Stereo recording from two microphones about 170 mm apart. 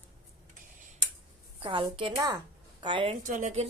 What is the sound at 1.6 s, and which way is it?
A woman's voice, 30° right (ahead or behind).